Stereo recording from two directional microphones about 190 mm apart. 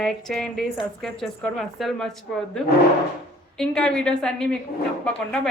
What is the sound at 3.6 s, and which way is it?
Speech, 5° left (ahead or behind).